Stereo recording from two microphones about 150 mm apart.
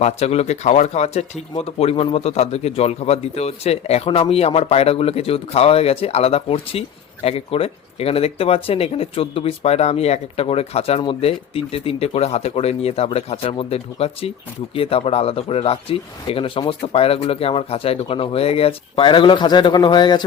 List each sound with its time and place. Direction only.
0.0 s speech: 45° left (ahead or behind)